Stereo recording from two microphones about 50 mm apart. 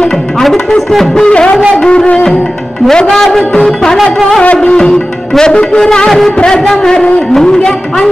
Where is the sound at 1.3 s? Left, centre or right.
Centre.